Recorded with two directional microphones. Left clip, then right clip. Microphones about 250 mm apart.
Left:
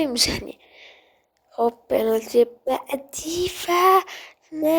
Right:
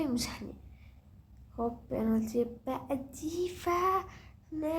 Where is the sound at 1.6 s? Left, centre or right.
Left.